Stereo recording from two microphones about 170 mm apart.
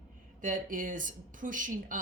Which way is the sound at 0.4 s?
50° right (ahead or behind).